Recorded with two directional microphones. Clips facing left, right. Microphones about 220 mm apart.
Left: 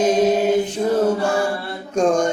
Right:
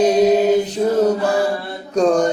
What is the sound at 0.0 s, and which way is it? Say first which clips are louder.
Mantra: right 3 dB; 35° right (ahead or behind).